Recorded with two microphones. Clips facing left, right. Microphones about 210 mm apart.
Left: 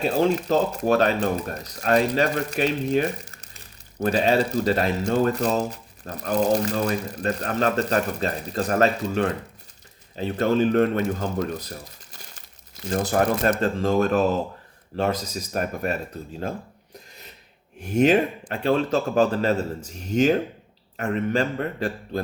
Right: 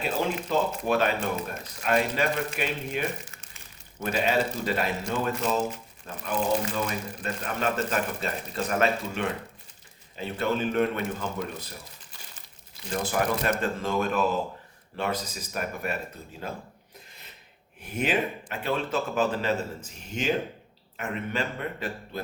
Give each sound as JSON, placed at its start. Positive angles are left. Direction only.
{"t": 0.0, "sound": "speech", "side_deg": 40}
{"t": 12.9, "sound": "speech", "side_deg": 40}
{"t": 17.7, "sound": "speech", "side_deg": 45}